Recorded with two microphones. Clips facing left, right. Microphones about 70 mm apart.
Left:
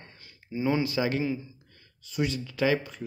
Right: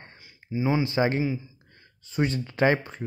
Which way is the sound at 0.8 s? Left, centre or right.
Right.